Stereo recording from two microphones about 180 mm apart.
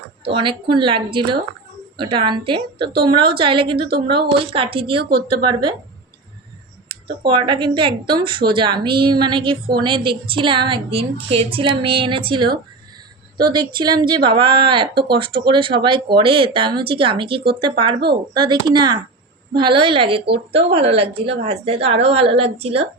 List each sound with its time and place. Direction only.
0.3 s a woman's voice: 30° right (ahead or behind)
7.3 s a woman's voice: 25° right (ahead or behind)